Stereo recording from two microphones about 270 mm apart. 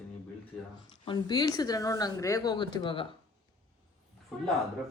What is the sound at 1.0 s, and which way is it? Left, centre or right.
Speech, centre.